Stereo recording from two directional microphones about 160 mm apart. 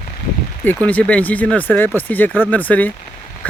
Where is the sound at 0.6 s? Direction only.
10° left (ahead or behind).